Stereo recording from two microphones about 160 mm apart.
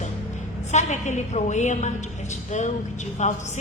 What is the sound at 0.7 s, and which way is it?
A woman's voice, 45° left (ahead or behind).